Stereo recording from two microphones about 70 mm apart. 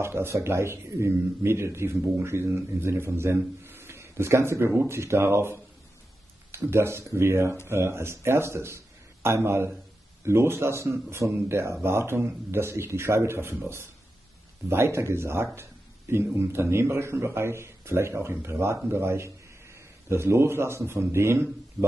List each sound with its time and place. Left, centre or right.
0.0 s a man's voice: right
6.6 s a man's voice: right
14.7 s a man's voice: right